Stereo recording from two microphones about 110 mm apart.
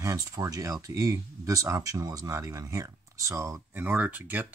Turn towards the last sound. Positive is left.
turn(degrees=-15)  # may be behind; listen again after turning